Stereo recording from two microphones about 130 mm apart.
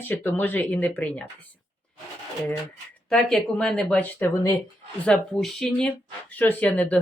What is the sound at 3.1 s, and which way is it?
Speech, 5° left (ahead or behind).